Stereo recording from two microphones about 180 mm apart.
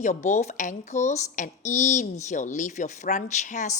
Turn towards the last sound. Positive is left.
turn(degrees=40)  # may be behind; listen again after turning